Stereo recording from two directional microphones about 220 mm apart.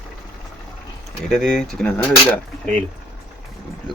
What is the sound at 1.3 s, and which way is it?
Speech, 5° left (ahead or behind).